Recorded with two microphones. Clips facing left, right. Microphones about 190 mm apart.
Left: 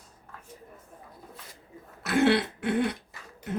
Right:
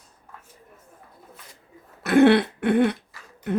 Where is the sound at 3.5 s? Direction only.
65° right (ahead or behind).